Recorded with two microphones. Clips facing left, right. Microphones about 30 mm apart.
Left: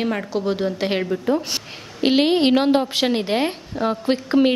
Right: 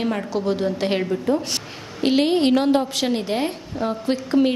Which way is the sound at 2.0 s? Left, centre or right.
Left.